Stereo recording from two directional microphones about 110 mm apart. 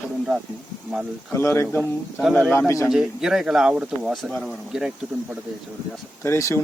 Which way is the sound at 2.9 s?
5° right (ahead or behind).